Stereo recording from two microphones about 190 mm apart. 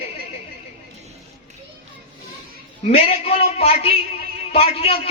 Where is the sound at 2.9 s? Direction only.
30° left (ahead or behind).